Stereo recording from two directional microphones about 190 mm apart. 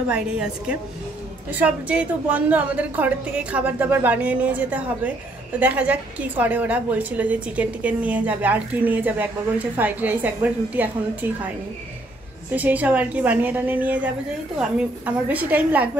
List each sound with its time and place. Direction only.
0.1 s a woman's voice: 5° right (ahead or behind)
12.4 s a woman's voice: 10° right (ahead or behind)